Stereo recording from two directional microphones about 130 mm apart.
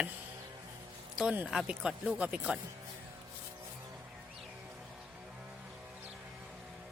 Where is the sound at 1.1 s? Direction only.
10° right (ahead or behind).